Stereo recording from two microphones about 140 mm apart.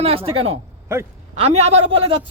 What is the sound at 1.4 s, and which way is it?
Speech, 50° right (ahead or behind).